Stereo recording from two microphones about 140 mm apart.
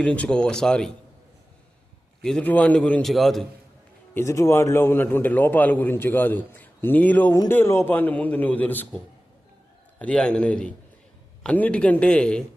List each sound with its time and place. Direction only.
0.0 s a man's voice: 10° left (ahead or behind)
2.2 s a man's voice: 5° left (ahead or behind)
4.1 s a man's voice: 20° left (ahead or behind)
10.0 s a man's voice: 5° left (ahead or behind)